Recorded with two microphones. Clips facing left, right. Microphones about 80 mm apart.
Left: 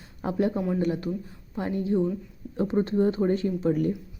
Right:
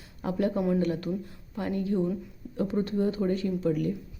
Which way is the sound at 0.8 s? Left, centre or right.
Centre.